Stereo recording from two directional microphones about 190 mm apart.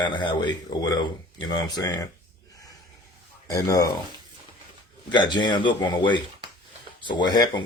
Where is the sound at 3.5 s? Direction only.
20° left (ahead or behind).